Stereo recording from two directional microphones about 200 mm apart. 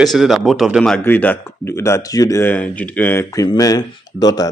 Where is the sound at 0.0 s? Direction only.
Centre (ahead or behind).